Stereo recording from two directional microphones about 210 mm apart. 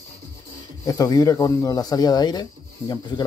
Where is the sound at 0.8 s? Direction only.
15° left (ahead or behind).